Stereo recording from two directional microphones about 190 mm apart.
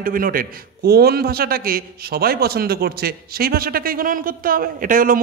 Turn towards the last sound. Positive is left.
turn(degrees=-45)  # may be behind; listen again after turning